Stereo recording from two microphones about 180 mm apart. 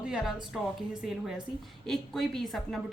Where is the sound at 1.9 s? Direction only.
Centre (ahead or behind).